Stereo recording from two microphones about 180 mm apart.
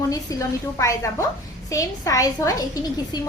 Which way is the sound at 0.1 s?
20° left (ahead or behind).